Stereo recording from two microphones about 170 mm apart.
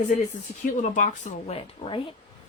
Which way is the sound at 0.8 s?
45° left (ahead or behind).